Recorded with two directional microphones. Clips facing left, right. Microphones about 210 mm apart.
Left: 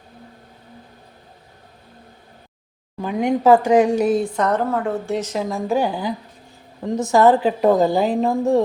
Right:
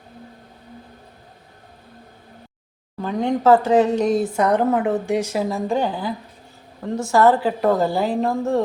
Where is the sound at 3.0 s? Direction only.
10° left (ahead or behind).